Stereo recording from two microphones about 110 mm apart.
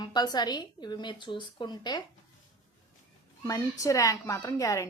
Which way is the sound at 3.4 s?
30° left (ahead or behind).